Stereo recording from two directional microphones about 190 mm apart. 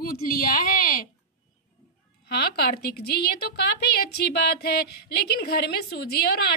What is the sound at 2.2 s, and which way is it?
Speech, 55° left (ahead or behind).